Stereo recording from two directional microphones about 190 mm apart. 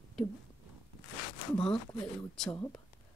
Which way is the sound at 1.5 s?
5° left (ahead or behind).